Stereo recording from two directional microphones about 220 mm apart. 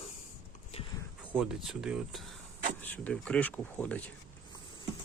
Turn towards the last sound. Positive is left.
turn(degrees=5)  # may be behind; listen again after turning